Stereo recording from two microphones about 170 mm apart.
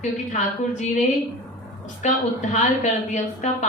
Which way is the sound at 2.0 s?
45° left (ahead or behind).